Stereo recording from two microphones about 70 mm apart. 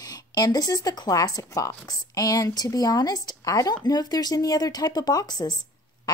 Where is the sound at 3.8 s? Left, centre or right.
Left.